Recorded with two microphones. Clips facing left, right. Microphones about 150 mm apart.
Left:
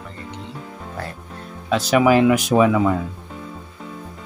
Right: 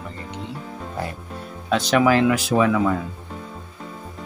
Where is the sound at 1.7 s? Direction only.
5° left (ahead or behind).